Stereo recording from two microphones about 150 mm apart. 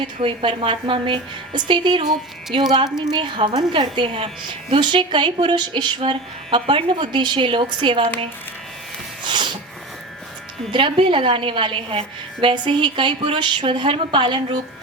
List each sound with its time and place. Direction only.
0.0 s a woman's voice: 35° right (ahead or behind)
9.2 s sneeze: 30° right (ahead or behind)
10.7 s a woman's voice: 35° right (ahead or behind)